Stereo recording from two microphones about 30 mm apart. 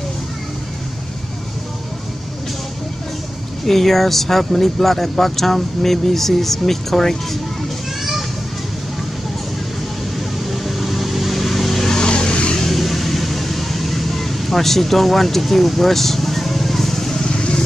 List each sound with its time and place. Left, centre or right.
3.6 s speech: centre
8.0 s children playing: centre
10.5 s vehicle: centre
11.9 s vehicle: left
12.5 s vehicle: centre
17.2 s vehicle: left